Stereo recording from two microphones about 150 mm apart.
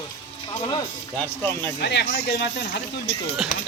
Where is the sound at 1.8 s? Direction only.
90° left.